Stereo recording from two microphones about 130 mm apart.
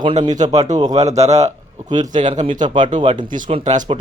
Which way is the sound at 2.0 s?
75° right (ahead or behind).